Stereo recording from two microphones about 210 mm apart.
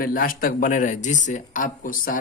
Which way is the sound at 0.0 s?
40° left (ahead or behind).